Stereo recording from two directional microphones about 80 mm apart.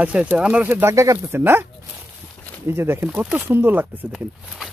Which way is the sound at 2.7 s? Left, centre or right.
Right.